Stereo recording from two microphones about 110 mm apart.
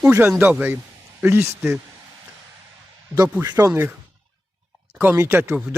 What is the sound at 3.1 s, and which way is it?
Speech, 25° right (ahead or behind).